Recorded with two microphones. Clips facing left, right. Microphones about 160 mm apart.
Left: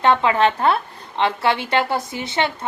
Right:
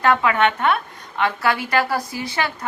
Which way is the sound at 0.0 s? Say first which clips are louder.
Left 1 dB; 25° left (ahead or behind).